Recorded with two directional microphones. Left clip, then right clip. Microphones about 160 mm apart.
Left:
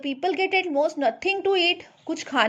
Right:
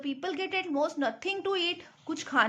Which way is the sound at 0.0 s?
35° left (ahead or behind).